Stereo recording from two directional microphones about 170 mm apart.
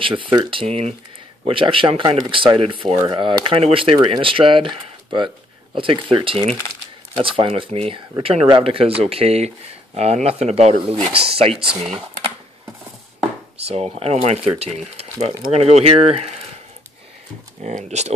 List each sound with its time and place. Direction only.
0.0 s speech: 30° right (ahead or behind)
13.6 s speech: 35° right (ahead or behind)
17.6 s speech: 45° right (ahead or behind)